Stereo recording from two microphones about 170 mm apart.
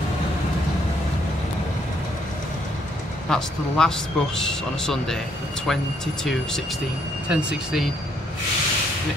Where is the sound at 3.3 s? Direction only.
5° left (ahead or behind).